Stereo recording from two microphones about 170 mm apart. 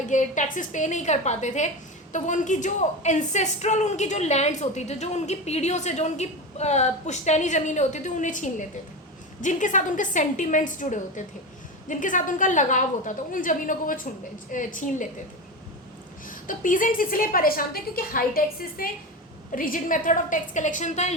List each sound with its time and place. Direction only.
0.1 s a woman's voice: 45° left (ahead or behind)
16.2 s a woman's voice: 55° left (ahead or behind)